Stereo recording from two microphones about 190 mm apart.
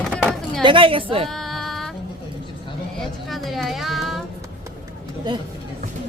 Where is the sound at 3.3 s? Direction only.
Centre (ahead or behind).